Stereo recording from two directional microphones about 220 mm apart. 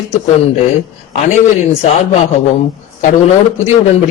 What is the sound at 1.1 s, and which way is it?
A man's voice, 30° left (ahead or behind).